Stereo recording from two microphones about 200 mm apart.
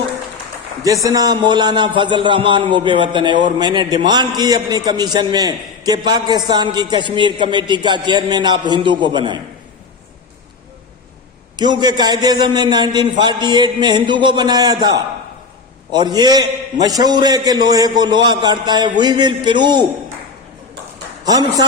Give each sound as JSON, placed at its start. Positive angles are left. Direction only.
{"t": 1.0, "sound": "a man's voice", "side_deg": -20}
{"t": 11.5, "sound": "a man's voice", "side_deg": -20}
{"t": 21.2, "sound": "a man's voice", "side_deg": -20}